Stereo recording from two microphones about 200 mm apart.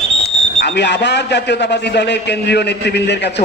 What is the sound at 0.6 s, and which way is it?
A man's voice, 60° left (ahead or behind).